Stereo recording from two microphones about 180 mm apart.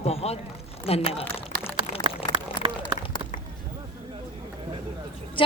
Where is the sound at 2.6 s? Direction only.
25° right (ahead or behind).